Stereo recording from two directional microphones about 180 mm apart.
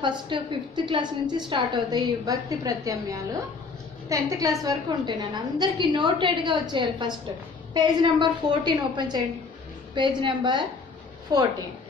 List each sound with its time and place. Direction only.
0.0 s a woman's voice: 25° right (ahead or behind)